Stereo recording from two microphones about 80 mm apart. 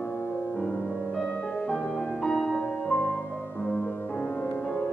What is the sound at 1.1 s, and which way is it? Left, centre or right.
Music, centre.